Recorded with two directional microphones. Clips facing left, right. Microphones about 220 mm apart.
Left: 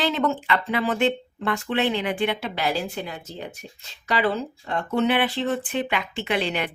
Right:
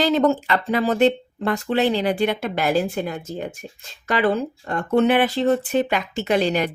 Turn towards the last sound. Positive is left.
turn(degrees=-40)  # may be behind; listen again after turning